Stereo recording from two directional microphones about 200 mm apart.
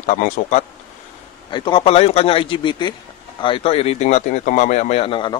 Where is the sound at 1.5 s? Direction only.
25° left (ahead or behind).